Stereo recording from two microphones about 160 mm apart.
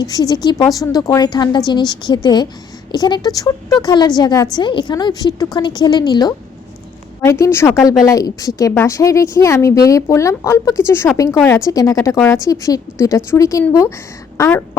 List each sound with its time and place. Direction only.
0.0 s a woman's voice: 25° left (ahead or behind)